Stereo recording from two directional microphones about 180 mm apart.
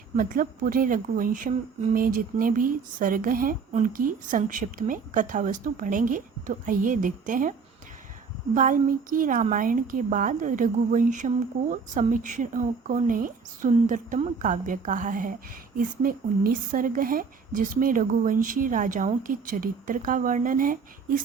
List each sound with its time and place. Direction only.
0.2 s speech: 50° right (ahead or behind)
8.5 s speech: 50° right (ahead or behind)